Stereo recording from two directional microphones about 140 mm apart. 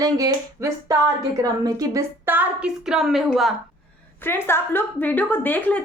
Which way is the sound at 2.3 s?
10° right (ahead or behind).